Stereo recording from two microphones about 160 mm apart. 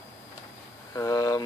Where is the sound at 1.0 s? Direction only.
20° left (ahead or behind).